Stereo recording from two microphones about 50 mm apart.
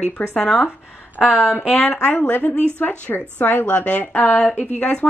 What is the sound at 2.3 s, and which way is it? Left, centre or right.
A woman's voice, left.